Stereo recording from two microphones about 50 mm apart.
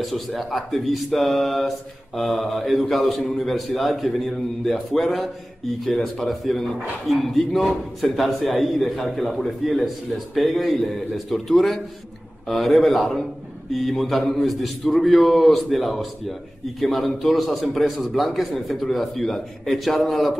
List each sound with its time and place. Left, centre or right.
0.0 s a man's voice: centre